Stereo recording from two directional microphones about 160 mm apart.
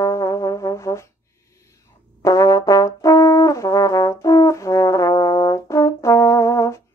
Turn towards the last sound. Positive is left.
turn(degrees=20)  # may be behind; listen again after turning